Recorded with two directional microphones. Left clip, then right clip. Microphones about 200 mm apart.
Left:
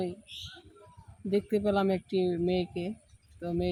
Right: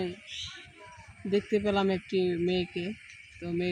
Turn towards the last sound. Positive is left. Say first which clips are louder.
# even
turn(degrees=20)  # may be behind; listen again after turning